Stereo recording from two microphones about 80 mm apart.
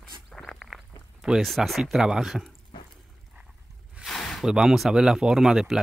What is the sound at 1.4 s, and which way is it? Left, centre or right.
Speech, centre.